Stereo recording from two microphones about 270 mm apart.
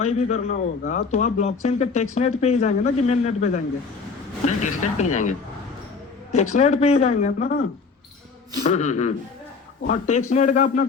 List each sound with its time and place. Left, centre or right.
0.0 s a man's voice: left
6.3 s a man's voice: left